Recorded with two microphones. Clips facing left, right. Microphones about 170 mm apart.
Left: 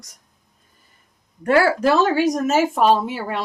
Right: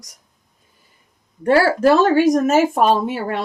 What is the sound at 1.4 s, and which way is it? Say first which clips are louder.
Speech: right 2 dB; 35° right (ahead or behind).